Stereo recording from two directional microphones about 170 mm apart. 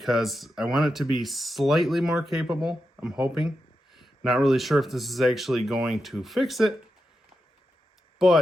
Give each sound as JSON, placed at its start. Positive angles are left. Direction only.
{"t": 0.0, "sound": "speech", "side_deg": 0}
{"t": 8.2, "sound": "speech", "side_deg": 0}